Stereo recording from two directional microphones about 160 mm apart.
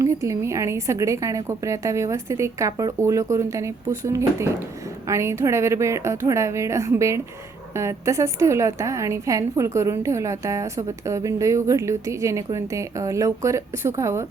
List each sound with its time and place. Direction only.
0.0 s a woman's voice: 20° right (ahead or behind)